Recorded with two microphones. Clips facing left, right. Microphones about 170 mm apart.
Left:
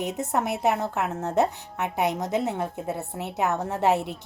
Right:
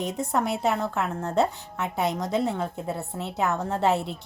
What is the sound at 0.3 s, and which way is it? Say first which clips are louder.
A woman's voice: left 1 dB; 20° left (ahead or behind).